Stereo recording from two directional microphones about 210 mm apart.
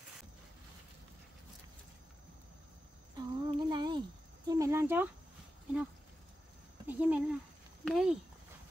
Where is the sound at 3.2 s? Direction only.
20° right (ahead or behind).